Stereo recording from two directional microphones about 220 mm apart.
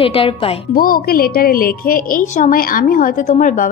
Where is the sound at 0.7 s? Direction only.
40° left (ahead or behind).